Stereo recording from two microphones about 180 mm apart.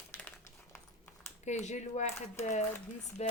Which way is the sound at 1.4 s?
40° left (ahead or behind).